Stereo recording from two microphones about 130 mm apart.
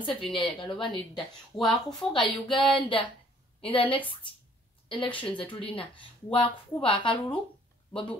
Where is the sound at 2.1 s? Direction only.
40° left (ahead or behind).